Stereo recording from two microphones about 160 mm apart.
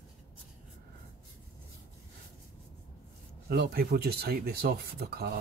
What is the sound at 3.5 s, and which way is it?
Speech, 80° right.